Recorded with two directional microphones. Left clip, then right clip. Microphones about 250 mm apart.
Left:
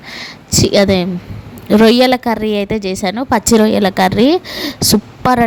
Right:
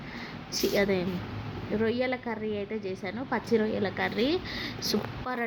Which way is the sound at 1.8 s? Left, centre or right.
Left.